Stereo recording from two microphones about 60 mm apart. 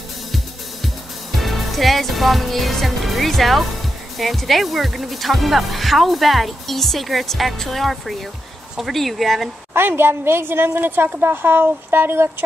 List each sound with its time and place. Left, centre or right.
1.3 s speech: centre
9.8 s a woman's voice: right